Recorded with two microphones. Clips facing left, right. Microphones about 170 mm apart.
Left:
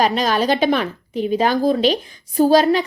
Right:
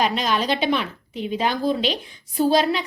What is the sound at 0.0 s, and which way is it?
A woman's voice, 40° left (ahead or behind).